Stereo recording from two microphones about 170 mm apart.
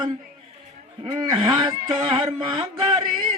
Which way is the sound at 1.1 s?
30° right (ahead or behind).